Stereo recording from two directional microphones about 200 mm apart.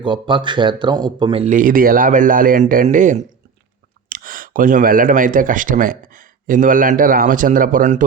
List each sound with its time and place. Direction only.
0.0 s speech: 25° right (ahead or behind); by 8.0 s 40° right (ahead or behind)